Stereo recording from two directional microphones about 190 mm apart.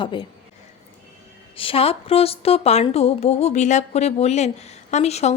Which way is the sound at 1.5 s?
30° left (ahead or behind).